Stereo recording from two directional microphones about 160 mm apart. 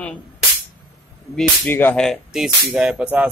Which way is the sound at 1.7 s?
10° left (ahead or behind).